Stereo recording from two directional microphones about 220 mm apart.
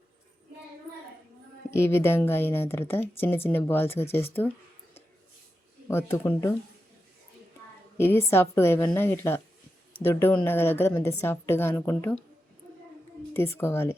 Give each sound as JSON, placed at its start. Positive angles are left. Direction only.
{"t": 1.7, "sound": "a woman's voice", "side_deg": 10}
{"t": 5.9, "sound": "a woman's voice", "side_deg": 10}
{"t": 7.9, "sound": "a woman's voice", "side_deg": 10}
{"t": 13.3, "sound": "a woman's voice", "side_deg": 10}